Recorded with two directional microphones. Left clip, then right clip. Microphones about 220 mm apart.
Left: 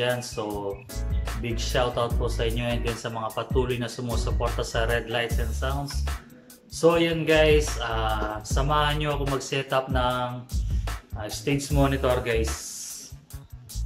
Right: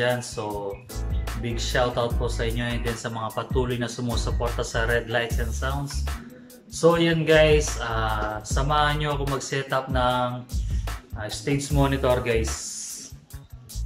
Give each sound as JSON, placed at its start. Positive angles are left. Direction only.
{"t": 0.0, "sound": "speech", "side_deg": 5}